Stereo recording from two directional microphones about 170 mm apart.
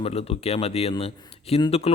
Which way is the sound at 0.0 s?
35° left (ahead or behind).